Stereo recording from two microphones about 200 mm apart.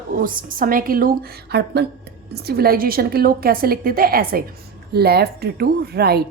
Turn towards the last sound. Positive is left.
turn(degrees=-50)  # may be behind; listen again after turning